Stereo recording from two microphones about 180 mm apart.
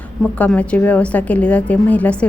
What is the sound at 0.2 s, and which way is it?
A woman's voice, 10° left (ahead or behind).